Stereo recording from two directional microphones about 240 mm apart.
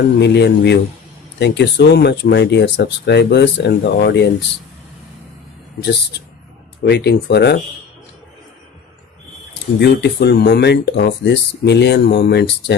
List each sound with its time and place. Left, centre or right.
0.2 s speech: left
6.8 s speech: left
9.7 s speech: left